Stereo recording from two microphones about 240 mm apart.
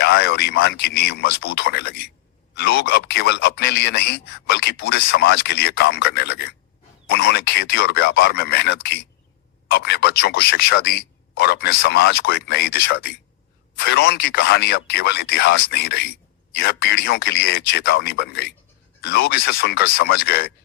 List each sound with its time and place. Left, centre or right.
0.0 s a man's voice: left